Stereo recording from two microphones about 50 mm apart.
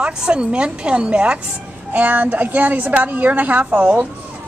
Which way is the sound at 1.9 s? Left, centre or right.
Right.